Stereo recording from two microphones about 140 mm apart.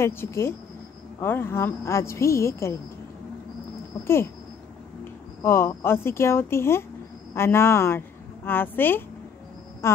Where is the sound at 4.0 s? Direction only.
15° left (ahead or behind).